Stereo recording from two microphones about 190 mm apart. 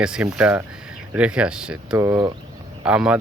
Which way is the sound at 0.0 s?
5° right (ahead or behind).